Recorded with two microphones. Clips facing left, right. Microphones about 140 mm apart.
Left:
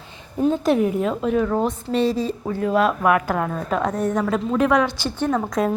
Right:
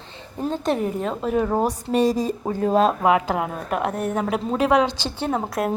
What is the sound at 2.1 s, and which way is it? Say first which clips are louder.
Speech: right 1 dB; 40° right (ahead or behind).